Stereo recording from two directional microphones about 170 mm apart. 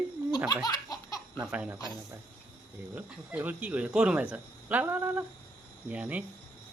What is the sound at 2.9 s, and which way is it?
Speech, 10° right (ahead or behind).